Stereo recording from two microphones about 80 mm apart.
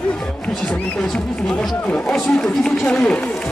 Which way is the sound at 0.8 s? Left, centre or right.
Centre.